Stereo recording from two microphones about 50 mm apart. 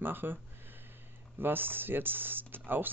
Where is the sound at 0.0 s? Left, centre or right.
Right.